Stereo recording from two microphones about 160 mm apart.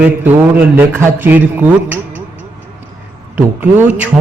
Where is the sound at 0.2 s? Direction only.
10° right (ahead or behind).